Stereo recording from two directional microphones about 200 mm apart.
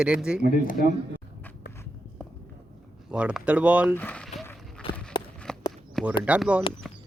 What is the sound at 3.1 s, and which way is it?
Speech, 5° right (ahead or behind).